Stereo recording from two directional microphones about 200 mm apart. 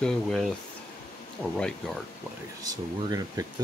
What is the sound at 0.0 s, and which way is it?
Speech, centre (ahead or behind).